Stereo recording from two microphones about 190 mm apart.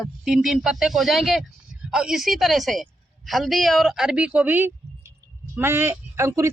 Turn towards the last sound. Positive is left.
turn(degrees=-15)  # may be behind; listen again after turning